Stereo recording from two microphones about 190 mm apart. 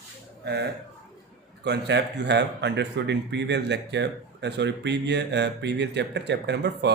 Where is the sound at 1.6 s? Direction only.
65° right (ahead or behind).